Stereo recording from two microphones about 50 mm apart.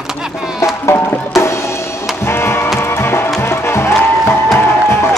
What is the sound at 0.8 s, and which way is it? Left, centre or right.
Music, left.